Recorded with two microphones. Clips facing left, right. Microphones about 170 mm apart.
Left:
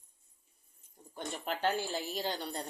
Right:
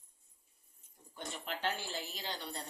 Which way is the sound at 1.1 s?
45° left (ahead or behind).